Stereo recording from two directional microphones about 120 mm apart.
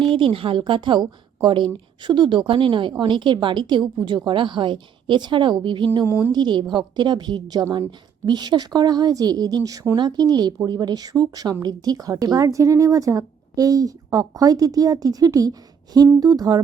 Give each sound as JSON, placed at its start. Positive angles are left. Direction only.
{"t": 0.0, "sound": "a woman's voice", "side_deg": -45}
{"t": 6.1, "sound": "a woman's voice", "side_deg": -20}
{"t": 6.3, "sound": "a woman's voice", "side_deg": -40}